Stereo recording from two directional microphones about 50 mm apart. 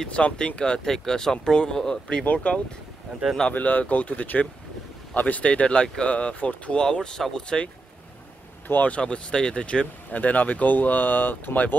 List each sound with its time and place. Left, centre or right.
0.1 s speech: left
3.5 s speech: left
5.5 s speech: left
8.6 s speech: left
8.9 s speech: centre
10.1 s speech: left